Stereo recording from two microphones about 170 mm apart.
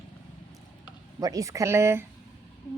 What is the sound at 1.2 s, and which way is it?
Speech, 20° right (ahead or behind).